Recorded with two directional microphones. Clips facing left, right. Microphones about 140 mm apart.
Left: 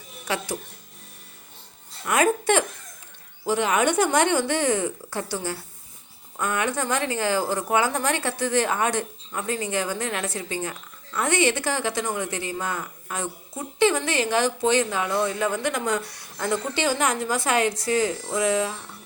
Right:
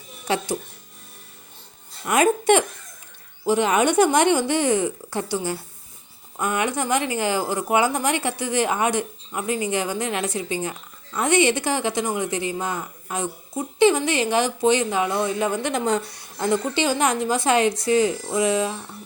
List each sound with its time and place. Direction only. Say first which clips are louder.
0.3 s speech: right 4 dB; 25° right (ahead or behind)
2.0 s speech: right 3 dB; 20° right (ahead or behind)